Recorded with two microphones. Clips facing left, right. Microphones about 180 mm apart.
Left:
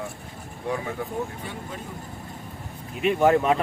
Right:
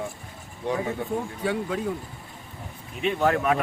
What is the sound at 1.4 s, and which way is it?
Speech, 90° right.